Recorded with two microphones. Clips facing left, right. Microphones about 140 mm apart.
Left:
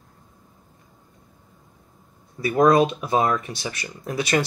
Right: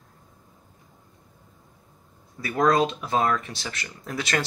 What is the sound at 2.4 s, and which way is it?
Speech, 15° left (ahead or behind).